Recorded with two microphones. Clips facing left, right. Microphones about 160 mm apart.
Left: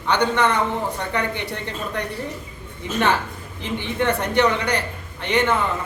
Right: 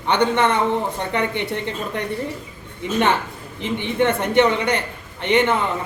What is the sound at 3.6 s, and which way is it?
A man's voice, 20° right (ahead or behind).